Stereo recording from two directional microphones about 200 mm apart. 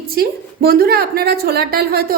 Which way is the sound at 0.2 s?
50° right (ahead or behind).